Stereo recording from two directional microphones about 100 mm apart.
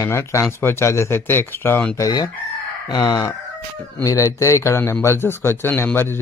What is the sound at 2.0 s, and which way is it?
Speech, 35° left (ahead or behind).